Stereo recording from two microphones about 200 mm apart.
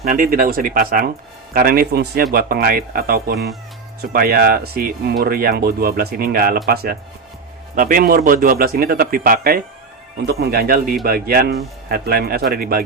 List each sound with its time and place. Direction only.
0.0 s speech: 45° right (ahead or behind)
7.8 s speech: 45° right (ahead or behind)